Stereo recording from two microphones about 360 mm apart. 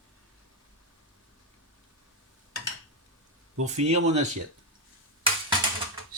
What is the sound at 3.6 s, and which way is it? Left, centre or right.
Speech, centre.